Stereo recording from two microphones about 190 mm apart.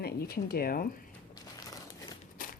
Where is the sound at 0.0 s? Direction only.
55° left (ahead or behind).